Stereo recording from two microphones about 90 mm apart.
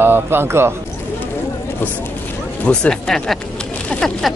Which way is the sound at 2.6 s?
10° left (ahead or behind).